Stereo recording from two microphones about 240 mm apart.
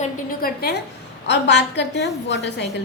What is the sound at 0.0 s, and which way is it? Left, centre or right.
A woman's voice, left.